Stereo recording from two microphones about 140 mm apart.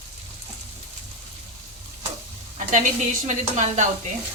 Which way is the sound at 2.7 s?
65° right (ahead or behind).